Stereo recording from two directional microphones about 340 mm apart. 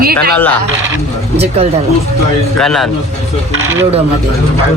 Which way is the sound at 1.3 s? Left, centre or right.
Centre.